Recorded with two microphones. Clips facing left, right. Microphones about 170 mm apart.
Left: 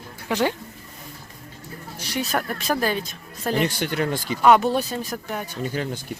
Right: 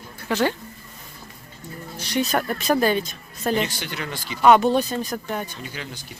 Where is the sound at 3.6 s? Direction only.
55° left (ahead or behind).